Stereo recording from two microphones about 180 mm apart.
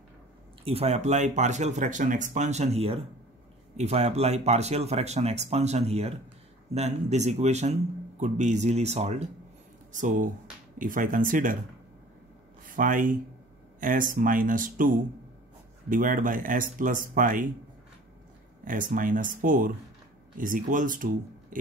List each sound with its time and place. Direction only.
0.7 s speech: 35° right (ahead or behind)
12.6 s speech: 45° right (ahead or behind)
18.6 s speech: 45° right (ahead or behind)